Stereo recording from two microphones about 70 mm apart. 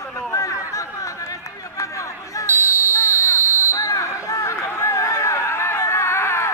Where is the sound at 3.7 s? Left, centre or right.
Left.